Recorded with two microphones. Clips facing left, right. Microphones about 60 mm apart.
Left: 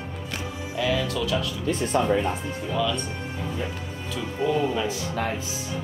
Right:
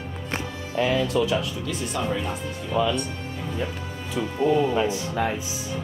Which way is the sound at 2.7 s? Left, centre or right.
Right.